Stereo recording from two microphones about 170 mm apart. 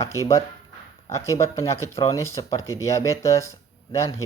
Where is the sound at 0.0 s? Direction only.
20° left (ahead or behind).